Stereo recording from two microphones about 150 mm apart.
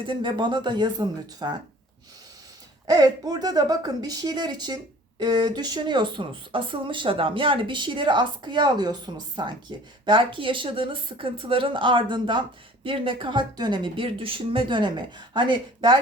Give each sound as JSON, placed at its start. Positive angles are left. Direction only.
{"t": 0.1, "sound": "speech", "side_deg": -30}
{"t": 2.9, "sound": "speech", "side_deg": -25}